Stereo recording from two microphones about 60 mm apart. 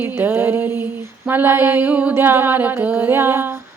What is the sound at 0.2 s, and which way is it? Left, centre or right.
Music, right.